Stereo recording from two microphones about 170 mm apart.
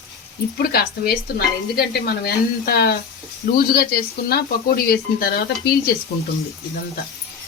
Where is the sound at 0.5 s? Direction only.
65° left (ahead or behind).